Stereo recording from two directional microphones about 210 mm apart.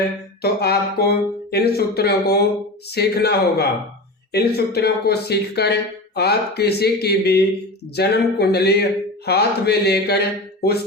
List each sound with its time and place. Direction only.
0.4 s speech: 50° left (ahead or behind)